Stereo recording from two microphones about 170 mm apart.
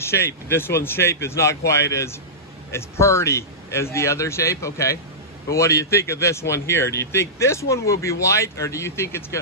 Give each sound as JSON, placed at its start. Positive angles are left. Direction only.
{"t": 0.0, "sound": "speech", "side_deg": 15}